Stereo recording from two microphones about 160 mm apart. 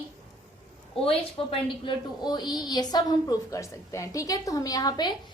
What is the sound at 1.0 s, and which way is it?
A woman's voice, 35° left (ahead or behind).